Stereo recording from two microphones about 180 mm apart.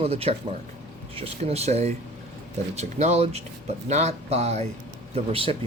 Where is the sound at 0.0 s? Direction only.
35° right (ahead or behind).